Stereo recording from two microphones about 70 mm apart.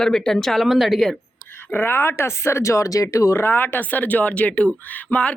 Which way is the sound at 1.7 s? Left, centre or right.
Left.